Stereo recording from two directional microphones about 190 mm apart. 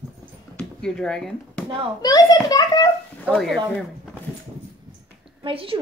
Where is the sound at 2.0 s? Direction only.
20° left (ahead or behind).